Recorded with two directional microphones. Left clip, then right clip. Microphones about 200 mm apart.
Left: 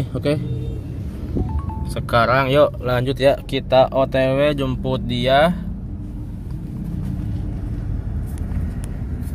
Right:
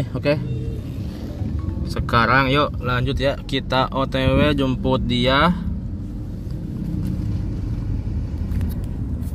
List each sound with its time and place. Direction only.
0.1 s speech: 15° right (ahead or behind)
2.0 s speech: centre (ahead or behind)